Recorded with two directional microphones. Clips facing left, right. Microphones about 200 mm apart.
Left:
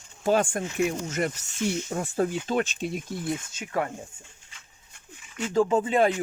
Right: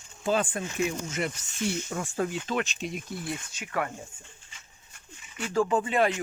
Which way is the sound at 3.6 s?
25° left (ahead or behind).